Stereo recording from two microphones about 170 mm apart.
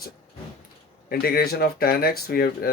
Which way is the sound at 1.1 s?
65° left (ahead or behind).